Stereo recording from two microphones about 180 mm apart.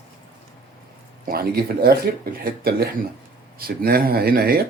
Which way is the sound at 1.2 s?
55° right (ahead or behind).